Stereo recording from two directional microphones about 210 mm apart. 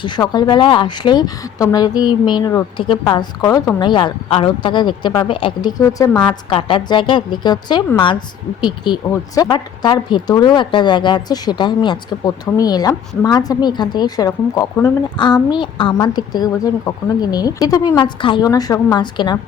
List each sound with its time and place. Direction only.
0.0 s speech: 20° left (ahead or behind)